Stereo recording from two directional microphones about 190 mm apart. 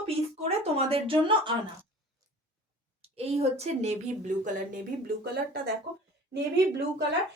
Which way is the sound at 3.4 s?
35° right (ahead or behind).